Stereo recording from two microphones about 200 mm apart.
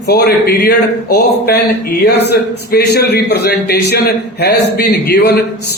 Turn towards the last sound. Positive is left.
turn(degrees=50)  # may be behind; listen again after turning